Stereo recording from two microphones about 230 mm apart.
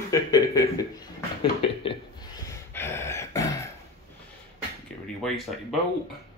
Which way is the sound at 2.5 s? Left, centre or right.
Centre.